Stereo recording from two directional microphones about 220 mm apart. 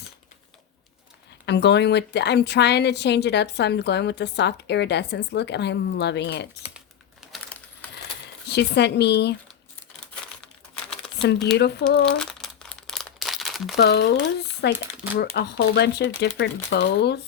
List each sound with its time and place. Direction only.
1.5 s a woman's voice: 50° left (ahead or behind)
6.6 s typing: 5° right (ahead or behind)
8.4 s a woman's voice: 50° left (ahead or behind)
11.2 s a woman's voice: 50° left (ahead or behind)
12.2 s crumpling: centre (ahead or behind)
13.7 s a woman's voice: 50° left (ahead or behind)